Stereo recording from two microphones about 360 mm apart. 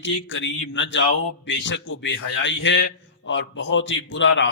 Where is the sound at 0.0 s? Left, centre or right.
Left.